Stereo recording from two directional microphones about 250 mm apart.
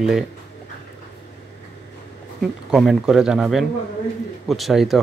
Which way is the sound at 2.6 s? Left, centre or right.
Centre.